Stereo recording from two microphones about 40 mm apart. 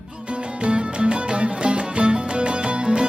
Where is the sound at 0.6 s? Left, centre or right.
Right.